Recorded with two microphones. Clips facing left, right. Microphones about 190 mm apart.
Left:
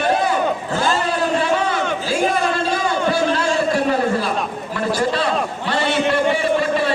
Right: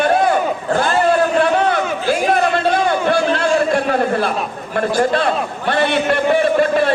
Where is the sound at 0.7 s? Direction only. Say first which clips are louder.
Right 10 dB; 55° right (ahead or behind).